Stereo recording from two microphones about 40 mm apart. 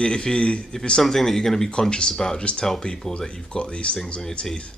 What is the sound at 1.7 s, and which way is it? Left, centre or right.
A man's voice, left.